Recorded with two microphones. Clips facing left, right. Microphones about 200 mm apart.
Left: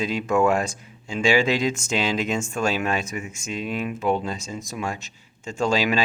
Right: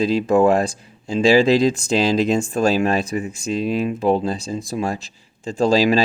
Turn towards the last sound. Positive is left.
turn(degrees=-35)  # may be behind; listen again after turning